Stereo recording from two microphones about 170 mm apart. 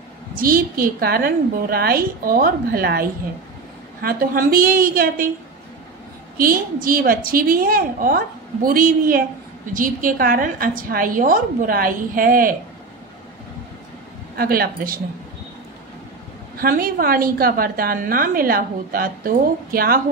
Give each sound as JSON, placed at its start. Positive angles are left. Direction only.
{"t": 0.4, "sound": "a woman's voice", "side_deg": -55}
{"t": 6.3, "sound": "a woman's voice", "side_deg": -55}
{"t": 14.3, "sound": "a woman's voice", "side_deg": -60}
{"t": 16.5, "sound": "a woman's voice", "side_deg": -55}